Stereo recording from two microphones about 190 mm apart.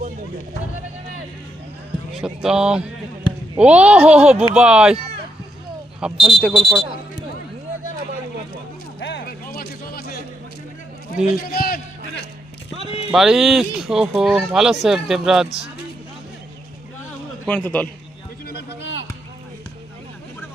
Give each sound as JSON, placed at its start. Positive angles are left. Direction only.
{"t": 2.2, "sound": "speech", "side_deg": -5}
{"t": 6.0, "sound": "speech", "side_deg": 0}
{"t": 9.0, "sound": "music", "side_deg": 70}
{"t": 11.3, "sound": "a man's voice", "side_deg": 50}
{"t": 13.1, "sound": "speech", "side_deg": -5}
{"t": 17.4, "sound": "speech", "side_deg": 10}
{"t": 18.4, "sound": "a sound", "side_deg": 65}